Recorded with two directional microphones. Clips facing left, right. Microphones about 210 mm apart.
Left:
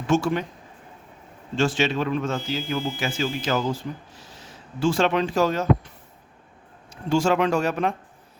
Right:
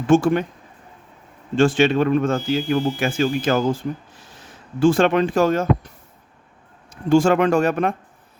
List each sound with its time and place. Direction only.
0.1 s speech: 50° right (ahead or behind)
1.5 s speech: 55° right (ahead or behind)
6.9 s speech: 50° right (ahead or behind)